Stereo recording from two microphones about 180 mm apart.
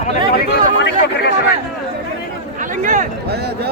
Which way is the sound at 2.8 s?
45° right (ahead or behind).